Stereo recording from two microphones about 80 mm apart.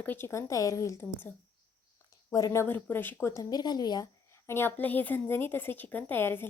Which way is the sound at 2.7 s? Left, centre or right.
Left.